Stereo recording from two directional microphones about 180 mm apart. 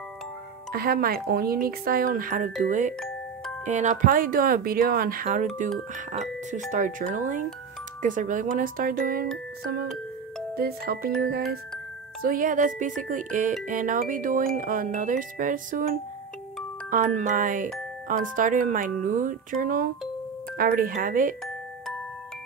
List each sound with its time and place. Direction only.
0.7 s speech: 55° right (ahead or behind)
6.7 s speech: 45° right (ahead or behind)
16.9 s speech: 40° right (ahead or behind)